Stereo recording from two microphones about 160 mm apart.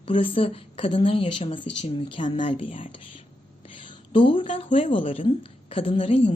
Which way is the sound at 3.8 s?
30° left (ahead or behind).